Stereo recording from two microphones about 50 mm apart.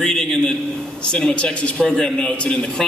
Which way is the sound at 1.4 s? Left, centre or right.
Left.